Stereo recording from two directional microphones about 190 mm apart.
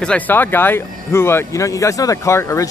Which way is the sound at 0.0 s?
5° left (ahead or behind).